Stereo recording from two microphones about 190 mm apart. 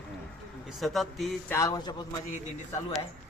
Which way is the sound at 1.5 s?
15° left (ahead or behind).